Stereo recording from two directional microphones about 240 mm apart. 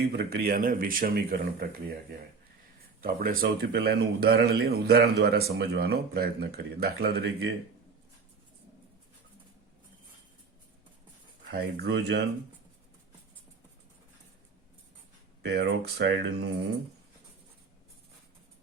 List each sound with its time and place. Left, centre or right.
0.2 s speech: right
11.5 s speech: right
15.4 s speech: right